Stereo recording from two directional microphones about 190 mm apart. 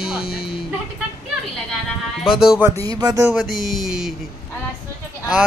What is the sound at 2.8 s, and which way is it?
Speech, 20° right (ahead or behind).